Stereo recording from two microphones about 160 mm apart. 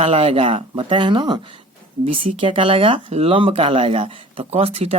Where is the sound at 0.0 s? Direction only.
35° right (ahead or behind).